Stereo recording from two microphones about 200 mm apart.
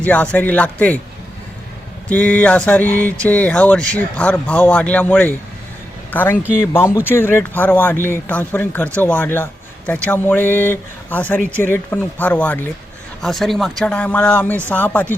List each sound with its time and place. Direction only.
0.0 s speech: 5° left (ahead or behind)
2.0 s speech: 5° left (ahead or behind)